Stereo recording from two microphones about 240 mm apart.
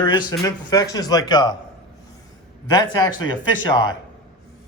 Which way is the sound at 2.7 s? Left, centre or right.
Centre.